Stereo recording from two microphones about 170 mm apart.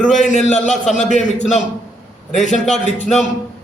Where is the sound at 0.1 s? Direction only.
45° left (ahead or behind).